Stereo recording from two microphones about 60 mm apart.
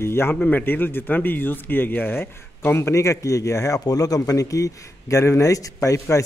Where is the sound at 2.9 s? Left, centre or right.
Left.